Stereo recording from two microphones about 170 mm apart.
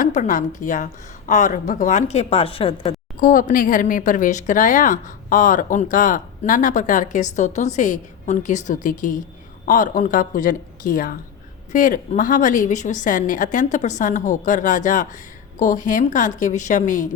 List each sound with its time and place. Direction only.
0.0 s speech: 45° left (ahead or behind)
3.2 s speech: 55° left (ahead or behind)